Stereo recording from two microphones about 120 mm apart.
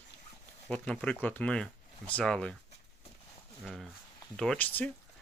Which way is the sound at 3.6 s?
Centre (ahead or behind).